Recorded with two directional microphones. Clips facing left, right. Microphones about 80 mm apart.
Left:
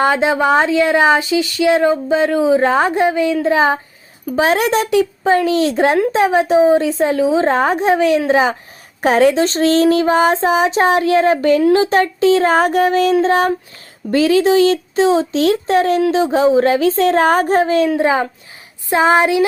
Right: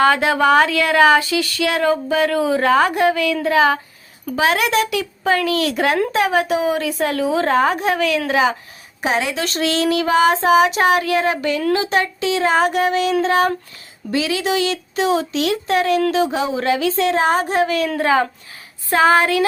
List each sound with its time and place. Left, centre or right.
0.0 s speech: left
4.4 s speech: left; by 7.5 s centre
7.5 s child singing: left
9.0 s a woman's voice: left
9.3 s child singing: left
17.6 s speech: left
17.8 s speech: centre